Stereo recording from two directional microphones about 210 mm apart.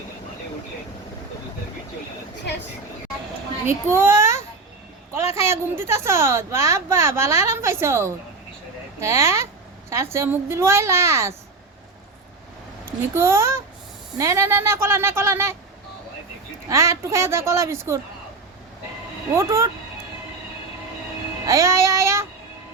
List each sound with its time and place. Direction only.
3.7 s a child's voice: 10° right (ahead or behind)
12.8 s a child's voice: 10° right (ahead or behind)
16.6 s a woman's voice: 15° right (ahead or behind)
19.3 s a woman's voice: 15° right (ahead or behind)
21.4 s a woman's voice: 15° right (ahead or behind)